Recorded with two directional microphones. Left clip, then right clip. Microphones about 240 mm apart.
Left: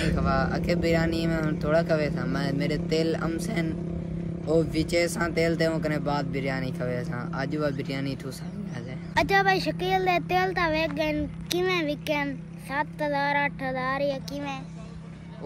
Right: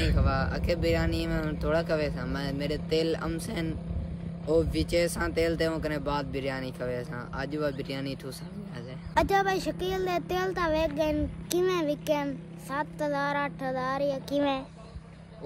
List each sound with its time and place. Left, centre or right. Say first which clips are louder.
0.0 s speech: left 4 dB; centre
9.1 s a child's voice: left 3 dB; centre
14.3 s a child's voice: right 7 dB; right